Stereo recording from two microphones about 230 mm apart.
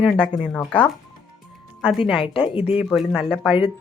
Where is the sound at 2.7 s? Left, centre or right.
Centre.